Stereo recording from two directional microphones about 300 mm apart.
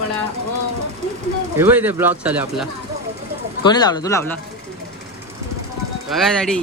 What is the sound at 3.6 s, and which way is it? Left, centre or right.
Speech, centre.